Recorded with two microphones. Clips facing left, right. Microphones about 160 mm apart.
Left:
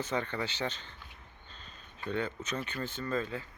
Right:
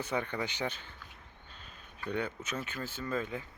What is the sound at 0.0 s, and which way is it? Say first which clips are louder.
Speech: even; 10° right (ahead or behind).